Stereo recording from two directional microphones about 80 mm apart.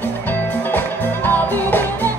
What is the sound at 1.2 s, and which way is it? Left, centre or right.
Music, left.